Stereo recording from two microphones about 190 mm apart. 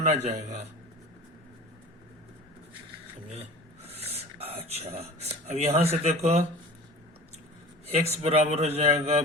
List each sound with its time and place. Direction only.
0.2 s a man's voice: 35° right (ahead or behind)
3.8 s a sound: 30° right (ahead or behind)
7.9 s a man's voice: 30° right (ahead or behind)